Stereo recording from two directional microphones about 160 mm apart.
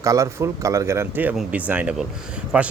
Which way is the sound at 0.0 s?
20° right (ahead or behind).